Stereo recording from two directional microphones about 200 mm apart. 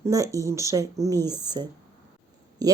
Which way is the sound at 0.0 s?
15° right (ahead or behind).